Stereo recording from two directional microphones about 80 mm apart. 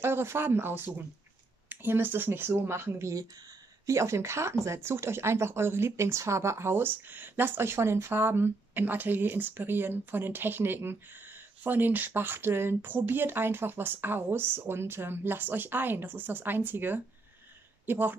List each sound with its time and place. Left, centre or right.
0.0 s speech: right